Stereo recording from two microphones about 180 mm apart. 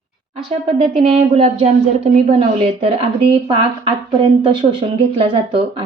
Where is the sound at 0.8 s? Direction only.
35° right (ahead or behind).